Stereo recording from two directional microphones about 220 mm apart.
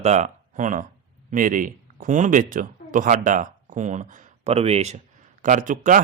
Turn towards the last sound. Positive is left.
turn(degrees=-35)  # may be behind; listen again after turning